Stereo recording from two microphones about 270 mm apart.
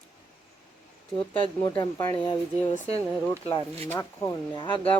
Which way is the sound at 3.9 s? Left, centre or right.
Centre.